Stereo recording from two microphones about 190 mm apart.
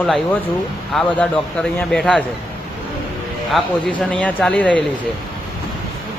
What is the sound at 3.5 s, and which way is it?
A man's voice, 5° left (ahead or behind).